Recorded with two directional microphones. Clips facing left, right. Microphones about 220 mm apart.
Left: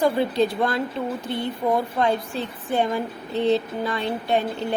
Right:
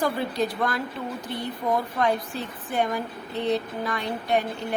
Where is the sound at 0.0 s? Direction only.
25° left (ahead or behind).